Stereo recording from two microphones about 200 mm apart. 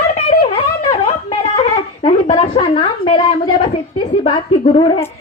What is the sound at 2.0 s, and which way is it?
A woman's voice, 30° left (ahead or behind).